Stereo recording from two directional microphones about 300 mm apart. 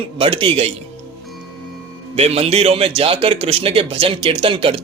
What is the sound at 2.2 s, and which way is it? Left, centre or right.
A man's voice, centre.